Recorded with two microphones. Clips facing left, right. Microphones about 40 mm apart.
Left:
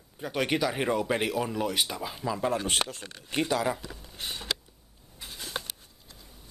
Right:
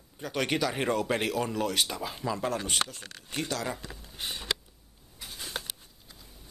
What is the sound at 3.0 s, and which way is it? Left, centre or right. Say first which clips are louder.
Speech: left 5 dB; left.